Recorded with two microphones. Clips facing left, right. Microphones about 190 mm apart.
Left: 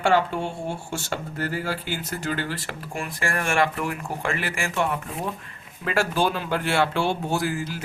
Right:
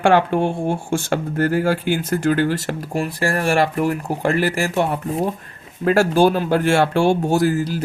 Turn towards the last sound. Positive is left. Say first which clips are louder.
# right 8 dB
turn(degrees=-40)  # may be behind; listen again after turning